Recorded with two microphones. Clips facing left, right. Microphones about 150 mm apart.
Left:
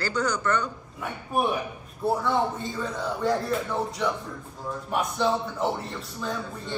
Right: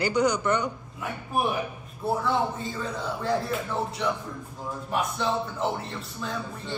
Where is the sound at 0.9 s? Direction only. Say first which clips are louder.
Left 2 dB; centre (ahead or behind).